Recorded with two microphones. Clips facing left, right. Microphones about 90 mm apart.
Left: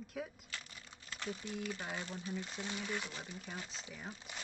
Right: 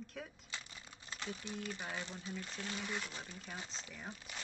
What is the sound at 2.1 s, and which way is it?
Speech, 15° left (ahead or behind).